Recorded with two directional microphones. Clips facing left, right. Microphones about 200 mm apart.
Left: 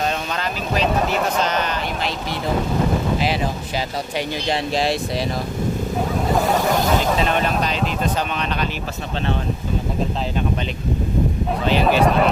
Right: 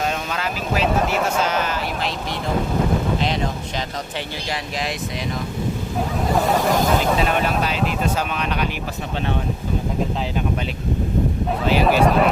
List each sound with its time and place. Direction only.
0.3 s speech: 5° right (ahead or behind)
3.2 s speech: 5° left (ahead or behind)
4.4 s speech: 30° left (ahead or behind)
6.2 s speech: centre (ahead or behind)
11.6 s speech: 5° right (ahead or behind)